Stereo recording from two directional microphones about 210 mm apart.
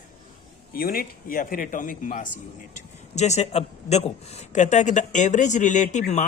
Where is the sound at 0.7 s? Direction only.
45° left (ahead or behind).